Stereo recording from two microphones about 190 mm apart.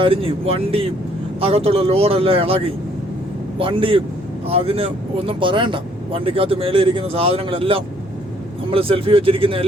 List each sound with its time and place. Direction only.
0.0 s speech: 30° right (ahead or behind)